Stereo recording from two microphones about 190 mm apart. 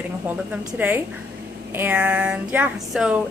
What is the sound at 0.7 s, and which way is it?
A woman's voice, 10° right (ahead or behind).